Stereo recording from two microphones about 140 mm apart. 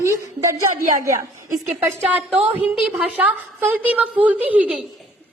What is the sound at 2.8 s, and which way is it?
A woman's voice, 10° right (ahead or behind).